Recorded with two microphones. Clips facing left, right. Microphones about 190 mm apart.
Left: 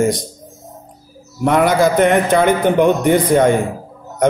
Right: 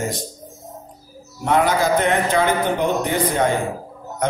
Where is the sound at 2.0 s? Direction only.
55° left (ahead or behind).